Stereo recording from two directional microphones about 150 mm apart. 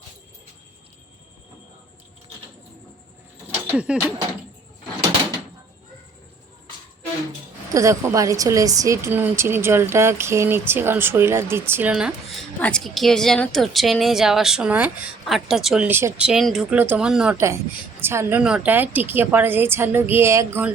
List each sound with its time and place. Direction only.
3.7 s speech: 10° right (ahead or behind)
7.7 s a woman's voice: 20° right (ahead or behind); by 12.5 s 5° right (ahead or behind)
12.5 s a woman's voice: 5° left (ahead or behind)
15.9 s a woman's voice: 15° right (ahead or behind)
17.3 s a woman's voice: 20° right (ahead or behind)